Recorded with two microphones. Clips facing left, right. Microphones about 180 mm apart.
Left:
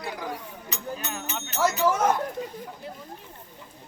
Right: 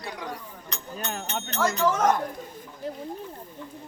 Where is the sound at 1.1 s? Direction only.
50° right (ahead or behind).